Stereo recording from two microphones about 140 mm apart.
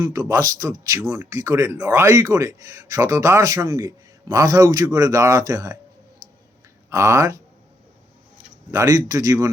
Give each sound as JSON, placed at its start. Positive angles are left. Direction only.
{"t": 0.0, "sound": "speech", "side_deg": -20}
{"t": 6.9, "sound": "speech", "side_deg": -20}
{"t": 8.7, "sound": "speech", "side_deg": -25}